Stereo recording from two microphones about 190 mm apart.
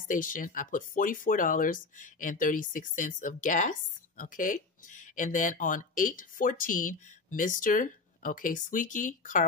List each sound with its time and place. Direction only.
0.1 s speech: 45° left (ahead or behind)